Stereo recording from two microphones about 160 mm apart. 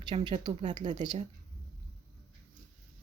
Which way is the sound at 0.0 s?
25° right (ahead or behind).